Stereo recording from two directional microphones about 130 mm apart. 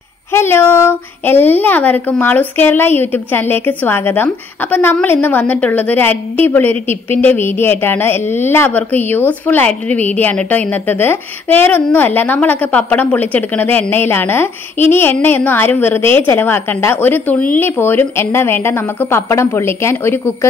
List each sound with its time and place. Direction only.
0.3 s a woman's voice: 20° left (ahead or behind)